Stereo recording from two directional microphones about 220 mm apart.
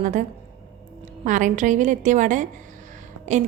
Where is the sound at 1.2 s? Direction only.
35° right (ahead or behind).